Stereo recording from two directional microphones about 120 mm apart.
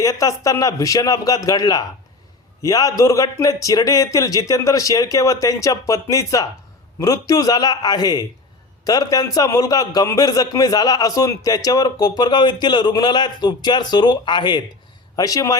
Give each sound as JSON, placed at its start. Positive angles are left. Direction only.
{"t": 0.0, "sound": "a man's voice", "side_deg": 30}